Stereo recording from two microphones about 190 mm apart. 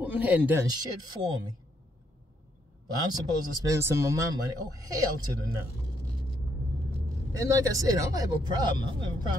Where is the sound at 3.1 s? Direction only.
15° right (ahead or behind).